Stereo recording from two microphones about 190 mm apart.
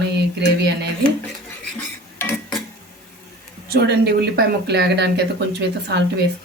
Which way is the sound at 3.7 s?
60° right (ahead or behind).